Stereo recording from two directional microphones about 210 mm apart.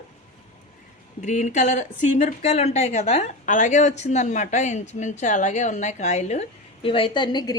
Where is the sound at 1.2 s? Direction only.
35° left (ahead or behind).